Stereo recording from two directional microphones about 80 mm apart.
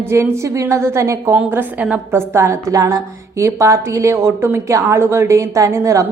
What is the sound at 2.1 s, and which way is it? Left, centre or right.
A woman's voice, right.